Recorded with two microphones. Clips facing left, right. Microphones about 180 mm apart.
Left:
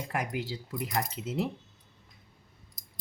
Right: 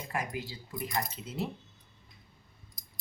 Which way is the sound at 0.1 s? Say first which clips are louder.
Left 2 dB; 75° left (ahead or behind).